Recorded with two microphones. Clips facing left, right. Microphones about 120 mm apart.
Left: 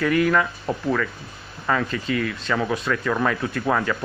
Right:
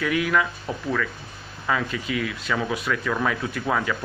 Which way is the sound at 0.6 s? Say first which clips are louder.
Left 3 dB; 10° left (ahead or behind).